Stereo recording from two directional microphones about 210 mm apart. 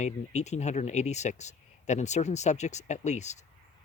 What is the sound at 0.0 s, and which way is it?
Speech, 35° left (ahead or behind).